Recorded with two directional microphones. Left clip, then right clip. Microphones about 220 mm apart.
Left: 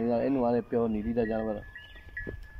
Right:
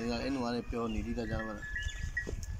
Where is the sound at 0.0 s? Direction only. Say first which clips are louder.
Left 8 dB; 30° left (ahead or behind).